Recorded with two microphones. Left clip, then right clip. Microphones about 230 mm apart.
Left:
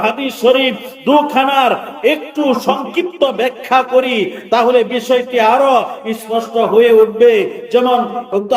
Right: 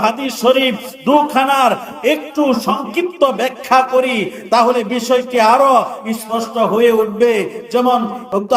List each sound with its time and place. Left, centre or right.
0.0 s a man's voice: right